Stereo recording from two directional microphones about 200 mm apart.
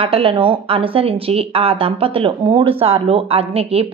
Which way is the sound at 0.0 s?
30° right (ahead or behind).